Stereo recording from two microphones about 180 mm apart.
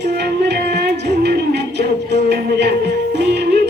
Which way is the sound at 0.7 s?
70° right (ahead or behind).